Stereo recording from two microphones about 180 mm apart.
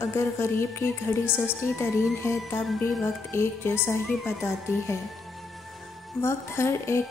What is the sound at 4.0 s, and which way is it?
Speech, centre (ahead or behind).